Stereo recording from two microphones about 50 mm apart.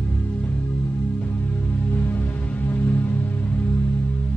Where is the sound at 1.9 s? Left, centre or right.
Left.